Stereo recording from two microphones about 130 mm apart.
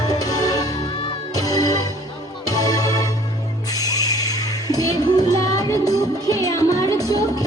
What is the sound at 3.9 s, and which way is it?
Music, 30° left (ahead or behind).